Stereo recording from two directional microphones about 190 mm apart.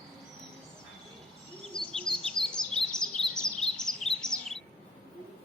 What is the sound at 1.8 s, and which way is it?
Bird, 25° left (ahead or behind).